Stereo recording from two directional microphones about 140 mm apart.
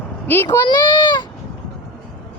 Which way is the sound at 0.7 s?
30° left (ahead or behind).